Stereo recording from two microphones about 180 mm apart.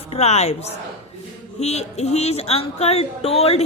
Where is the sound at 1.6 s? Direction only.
35° left (ahead or behind).